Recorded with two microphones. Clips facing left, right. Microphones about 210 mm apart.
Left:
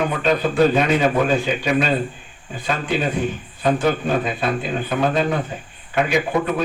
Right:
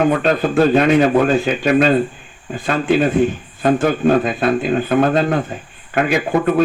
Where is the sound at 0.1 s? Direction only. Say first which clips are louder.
Right 4 dB; 55° right (ahead or behind).